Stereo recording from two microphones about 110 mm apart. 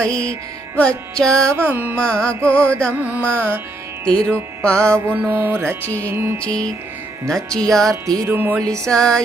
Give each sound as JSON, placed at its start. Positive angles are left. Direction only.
{"t": 0.0, "sound": "music", "side_deg": 10}
{"t": 1.5, "sound": "music", "side_deg": -20}
{"t": 2.0, "sound": "music", "side_deg": 10}
{"t": 2.3, "sound": "music", "side_deg": -25}
{"t": 4.3, "sound": "music", "side_deg": 10}
{"t": 4.8, "sound": "music", "side_deg": -25}
{"t": 7.3, "sound": "speech", "side_deg": 5}
{"t": 8.0, "sound": "music", "side_deg": -30}
{"t": 8.3, "sound": "music", "side_deg": -20}
{"t": 8.9, "sound": "music", "side_deg": 5}